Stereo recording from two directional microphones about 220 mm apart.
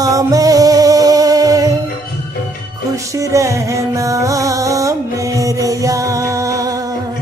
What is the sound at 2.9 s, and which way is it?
Music, 15° right (ahead or behind).